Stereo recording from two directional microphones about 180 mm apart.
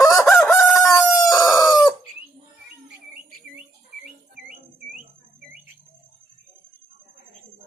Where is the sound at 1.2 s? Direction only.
20° left (ahead or behind).